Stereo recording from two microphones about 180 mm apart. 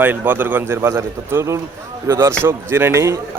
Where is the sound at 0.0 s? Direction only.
10° right (ahead or behind).